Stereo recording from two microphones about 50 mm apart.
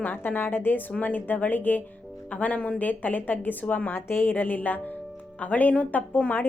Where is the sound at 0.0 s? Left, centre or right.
Left.